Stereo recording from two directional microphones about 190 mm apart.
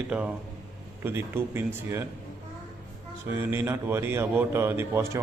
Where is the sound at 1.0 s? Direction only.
10° right (ahead or behind).